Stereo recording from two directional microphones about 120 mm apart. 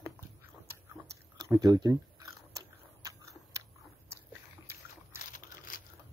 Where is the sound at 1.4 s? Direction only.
30° right (ahead or behind).